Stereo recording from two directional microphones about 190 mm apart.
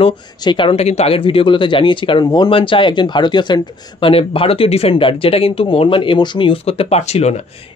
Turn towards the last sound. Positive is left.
turn(degrees=35)  # may be behind; listen again after turning